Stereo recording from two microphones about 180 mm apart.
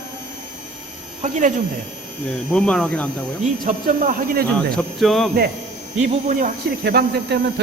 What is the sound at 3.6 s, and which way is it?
Speech, 45° right (ahead or behind).